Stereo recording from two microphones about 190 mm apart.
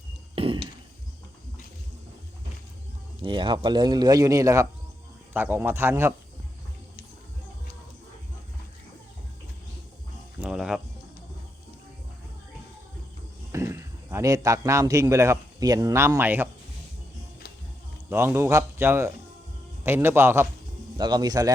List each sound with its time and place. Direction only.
0.3 s a sound: 30° right (ahead or behind)
3.2 s a man's voice: 25° right (ahead or behind)
10.4 s music: 5° right (ahead or behind)
13.5 s a man's voice: 15° right (ahead or behind)
18.1 s a man's voice: 10° right (ahead or behind)